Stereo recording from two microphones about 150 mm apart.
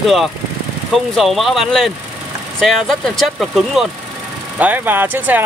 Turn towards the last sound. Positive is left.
turn(degrees=-10)  # may be behind; listen again after turning